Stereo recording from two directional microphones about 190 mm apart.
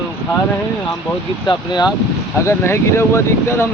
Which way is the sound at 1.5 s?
20° left (ahead or behind).